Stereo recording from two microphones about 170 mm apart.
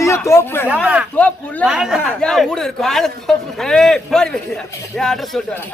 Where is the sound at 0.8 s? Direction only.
5° right (ahead or behind).